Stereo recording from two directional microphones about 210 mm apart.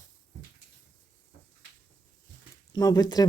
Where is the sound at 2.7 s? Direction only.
15° left (ahead or behind).